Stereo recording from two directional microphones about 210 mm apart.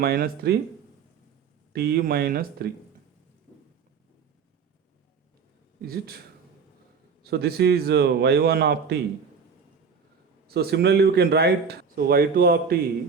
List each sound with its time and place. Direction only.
0.0 s a man's voice: 45° right (ahead or behind)
1.7 s a man's voice: 50° right (ahead or behind)
5.8 s a man's voice: 45° right (ahead or behind)
7.3 s a man's voice: 50° right (ahead or behind)
10.4 s a man's voice: 50° right (ahead or behind)